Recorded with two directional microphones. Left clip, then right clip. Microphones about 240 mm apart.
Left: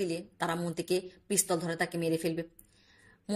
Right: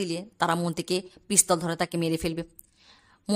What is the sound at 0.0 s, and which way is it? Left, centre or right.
A woman's voice, centre.